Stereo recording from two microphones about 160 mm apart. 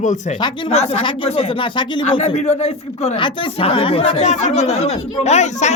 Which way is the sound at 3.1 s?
30° left (ahead or behind).